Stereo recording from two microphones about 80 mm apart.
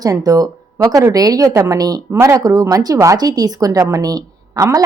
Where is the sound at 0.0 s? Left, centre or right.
Right.